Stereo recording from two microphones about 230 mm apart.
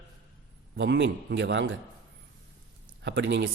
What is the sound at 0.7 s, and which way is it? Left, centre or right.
A man's voice, right.